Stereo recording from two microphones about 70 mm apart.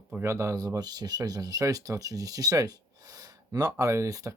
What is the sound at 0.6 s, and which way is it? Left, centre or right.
Speech, right.